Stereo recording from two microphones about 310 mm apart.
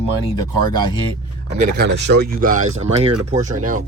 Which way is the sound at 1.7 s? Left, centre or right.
Right.